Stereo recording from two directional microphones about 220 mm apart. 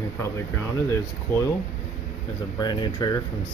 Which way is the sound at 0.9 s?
10° left (ahead or behind).